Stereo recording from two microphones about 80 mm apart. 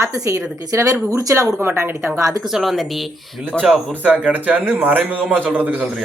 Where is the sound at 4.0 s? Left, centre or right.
Centre.